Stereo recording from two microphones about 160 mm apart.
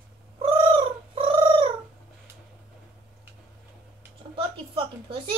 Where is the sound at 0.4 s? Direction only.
35° right (ahead or behind).